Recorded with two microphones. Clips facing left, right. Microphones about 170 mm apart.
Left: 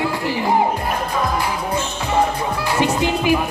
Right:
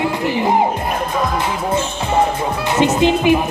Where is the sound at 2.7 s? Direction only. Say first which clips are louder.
Right 5 dB; 20° right (ahead or behind).